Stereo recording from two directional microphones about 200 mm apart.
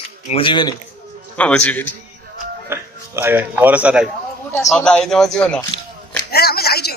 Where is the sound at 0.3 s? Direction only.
25° left (ahead or behind).